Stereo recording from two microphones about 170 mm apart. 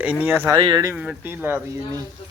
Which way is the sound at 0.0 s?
10° right (ahead or behind).